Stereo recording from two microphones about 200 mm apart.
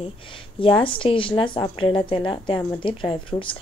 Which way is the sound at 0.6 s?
25° left (ahead or behind).